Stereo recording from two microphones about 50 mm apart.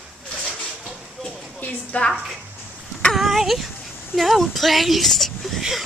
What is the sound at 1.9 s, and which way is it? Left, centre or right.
Speech, left.